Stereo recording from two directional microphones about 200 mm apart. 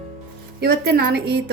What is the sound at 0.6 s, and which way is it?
Speech, 50° right (ahead or behind).